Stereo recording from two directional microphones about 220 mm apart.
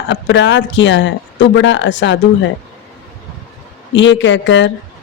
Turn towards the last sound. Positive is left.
turn(degrees=55)  # may be behind; listen again after turning